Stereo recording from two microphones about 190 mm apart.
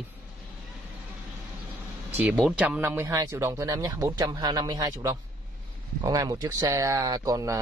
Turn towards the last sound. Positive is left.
turn(degrees=-15)  # may be behind; listen again after turning